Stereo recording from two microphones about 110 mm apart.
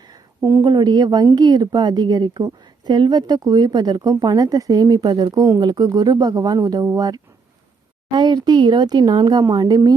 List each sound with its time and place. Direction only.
0.6 s a woman's voice: 40° right (ahead or behind)